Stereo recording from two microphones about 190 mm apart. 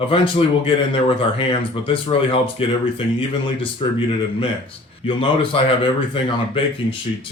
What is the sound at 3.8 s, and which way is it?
Speech, 25° left (ahead or behind).